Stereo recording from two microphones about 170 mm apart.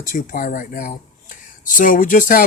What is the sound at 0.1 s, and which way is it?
Speech, 55° left (ahead or behind).